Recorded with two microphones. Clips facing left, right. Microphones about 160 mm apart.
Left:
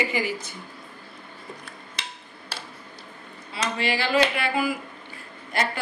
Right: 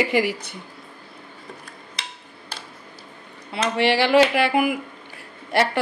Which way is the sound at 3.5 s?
70° right (ahead or behind).